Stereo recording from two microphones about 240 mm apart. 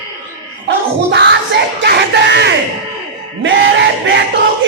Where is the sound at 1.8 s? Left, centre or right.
Right.